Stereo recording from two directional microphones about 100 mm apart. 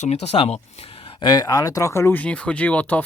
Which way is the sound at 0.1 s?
90° left.